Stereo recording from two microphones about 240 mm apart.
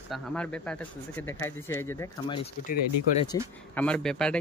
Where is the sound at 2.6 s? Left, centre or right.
Left.